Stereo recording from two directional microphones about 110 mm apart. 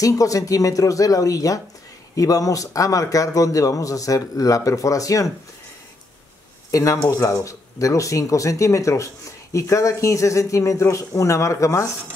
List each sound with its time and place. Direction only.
0.0 s a man's voice: 30° left (ahead or behind)
6.7 s speech: 30° left (ahead or behind)